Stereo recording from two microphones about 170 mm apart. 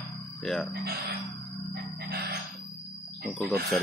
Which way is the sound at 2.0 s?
65° right (ahead or behind).